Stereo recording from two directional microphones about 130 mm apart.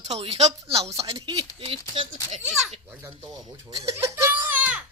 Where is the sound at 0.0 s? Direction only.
55° right (ahead or behind).